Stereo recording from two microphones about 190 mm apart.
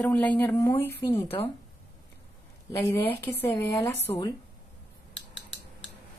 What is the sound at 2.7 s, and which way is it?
Speech, 15° left (ahead or behind).